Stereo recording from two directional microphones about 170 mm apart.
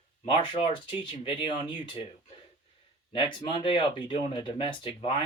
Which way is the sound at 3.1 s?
30° left (ahead or behind).